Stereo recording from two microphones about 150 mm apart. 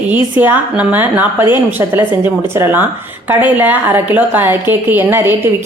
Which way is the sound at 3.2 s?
10° right (ahead or behind).